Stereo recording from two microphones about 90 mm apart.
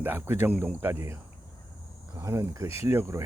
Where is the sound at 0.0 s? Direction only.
20° right (ahead or behind).